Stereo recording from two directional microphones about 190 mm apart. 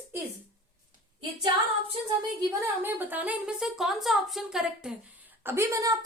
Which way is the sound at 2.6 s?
10° right (ahead or behind).